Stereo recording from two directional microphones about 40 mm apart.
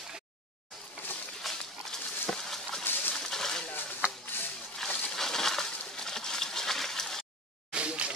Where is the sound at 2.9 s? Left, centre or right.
Left.